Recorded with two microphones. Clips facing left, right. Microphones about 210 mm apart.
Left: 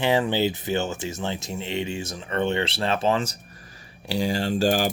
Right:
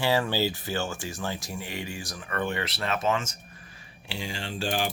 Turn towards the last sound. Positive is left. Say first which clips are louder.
# left 8 dB
turn(degrees=40)  # may be behind; listen again after turning